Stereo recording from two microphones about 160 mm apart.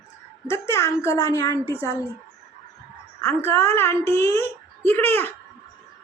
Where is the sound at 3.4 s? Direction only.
15° left (ahead or behind).